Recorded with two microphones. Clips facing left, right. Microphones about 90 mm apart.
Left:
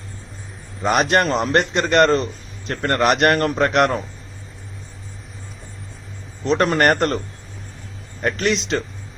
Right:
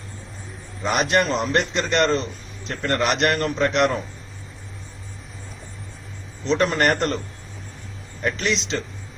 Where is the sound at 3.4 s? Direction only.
50° left (ahead or behind).